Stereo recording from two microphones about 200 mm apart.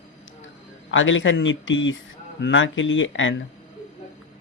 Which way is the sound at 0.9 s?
75° left (ahead or behind).